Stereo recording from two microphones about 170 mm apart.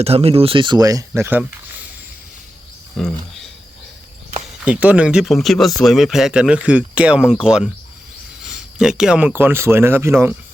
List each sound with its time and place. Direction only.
0.0 s speech: 35° right (ahead or behind); by 1.9 s 10° right (ahead or behind)
3.0 s a sound: centre (ahead or behind)
4.6 s speech: 10° right (ahead or behind)